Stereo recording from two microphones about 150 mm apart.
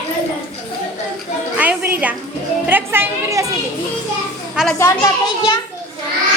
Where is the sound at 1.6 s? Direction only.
10° right (ahead or behind).